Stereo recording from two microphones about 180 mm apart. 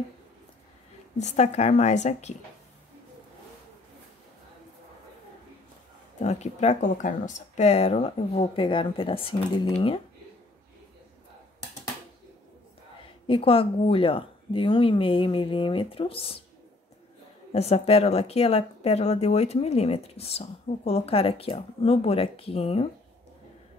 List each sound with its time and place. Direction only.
1.1 s a woman's voice: 40° left (ahead or behind)
6.1 s a woman's voice: 40° left (ahead or behind)
13.3 s speech: 30° left (ahead or behind)
17.5 s a woman's voice: 35° left (ahead or behind)